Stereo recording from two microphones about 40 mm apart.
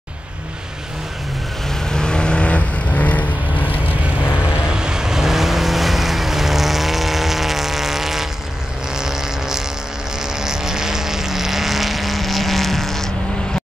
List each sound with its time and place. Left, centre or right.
1.7 s vehicle: centre; by 3.7 s left
4.7 s vehicle: centre